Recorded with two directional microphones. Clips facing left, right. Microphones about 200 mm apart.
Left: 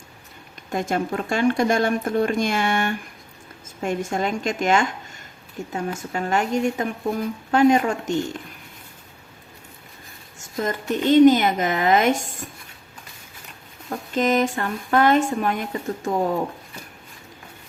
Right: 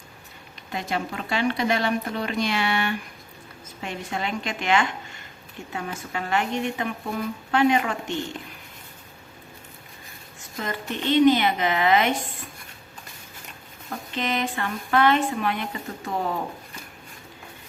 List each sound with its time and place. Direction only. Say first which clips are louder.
0.7 s a woman's voice: left 5 dB; 45° left (ahead or behind)
10.6 s a woman's voice: left 6 dB; 45° left (ahead or behind)
14.1 s a woman's voice: left 7 dB; 45° left (ahead or behind)